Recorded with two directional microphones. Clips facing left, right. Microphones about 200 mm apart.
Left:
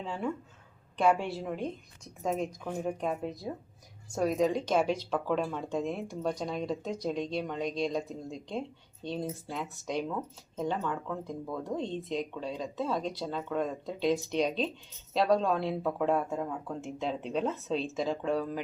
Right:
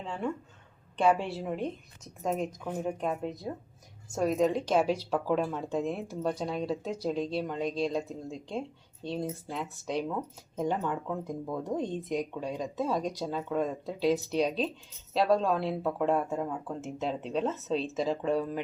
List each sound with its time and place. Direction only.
0.0 s speech: centre (ahead or behind)
10.2 s speech: 15° right (ahead or behind)